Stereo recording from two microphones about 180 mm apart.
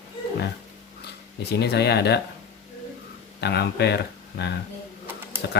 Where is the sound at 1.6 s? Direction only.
65° left (ahead or behind).